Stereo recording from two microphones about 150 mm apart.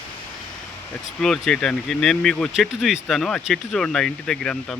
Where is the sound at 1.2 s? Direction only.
5° left (ahead or behind).